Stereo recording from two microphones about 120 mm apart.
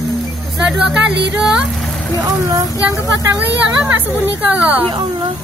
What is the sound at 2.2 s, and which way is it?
A child's voice, 30° right (ahead or behind).